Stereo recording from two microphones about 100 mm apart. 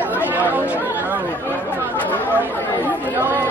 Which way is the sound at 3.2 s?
25° right (ahead or behind).